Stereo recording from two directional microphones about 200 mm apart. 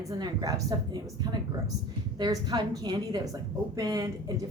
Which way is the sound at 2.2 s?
20° right (ahead or behind).